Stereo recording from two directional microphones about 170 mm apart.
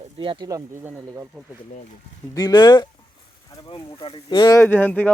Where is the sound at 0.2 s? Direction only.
25° right (ahead or behind).